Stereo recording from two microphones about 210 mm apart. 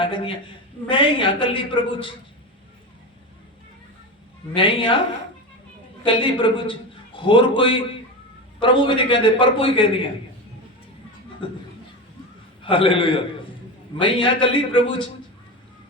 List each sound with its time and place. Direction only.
0.0 s a man's voice: 25° left (ahead or behind)
4.5 s a man's voice: 25° left (ahead or behind)
6.1 s a man's voice: 25° left (ahead or behind)
11.4 s a man's voice: 25° left (ahead or behind)
12.6 s a man's voice: 25° left (ahead or behind)